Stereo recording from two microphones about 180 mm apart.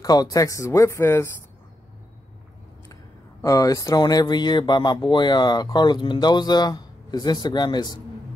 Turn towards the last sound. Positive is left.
turn(degrees=25)  # may be behind; listen again after turning